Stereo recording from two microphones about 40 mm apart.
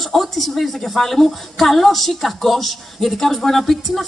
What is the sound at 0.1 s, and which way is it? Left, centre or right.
A woman's voice, centre.